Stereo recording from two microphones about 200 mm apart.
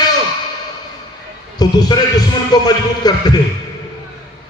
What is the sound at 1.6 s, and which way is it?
A man's voice, 20° left (ahead or behind).